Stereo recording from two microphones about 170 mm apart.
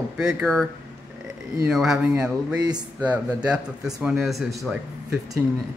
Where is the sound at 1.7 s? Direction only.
Centre (ahead or behind).